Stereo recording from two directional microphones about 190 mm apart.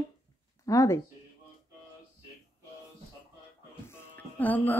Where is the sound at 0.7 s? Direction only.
15° left (ahead or behind).